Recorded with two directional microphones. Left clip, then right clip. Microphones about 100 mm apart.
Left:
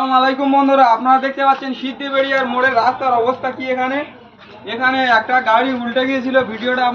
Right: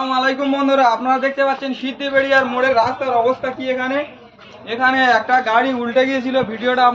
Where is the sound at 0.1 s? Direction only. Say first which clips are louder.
Left 5 dB; 45° right (ahead or behind).